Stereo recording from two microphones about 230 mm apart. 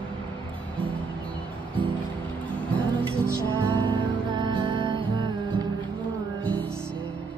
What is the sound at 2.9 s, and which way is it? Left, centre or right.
Music, right.